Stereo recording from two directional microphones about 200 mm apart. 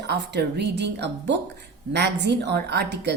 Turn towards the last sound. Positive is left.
turn(degrees=-60)  # may be behind; listen again after turning